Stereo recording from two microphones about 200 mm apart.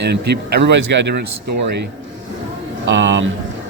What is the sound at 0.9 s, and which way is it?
Speech, 60° right (ahead or behind).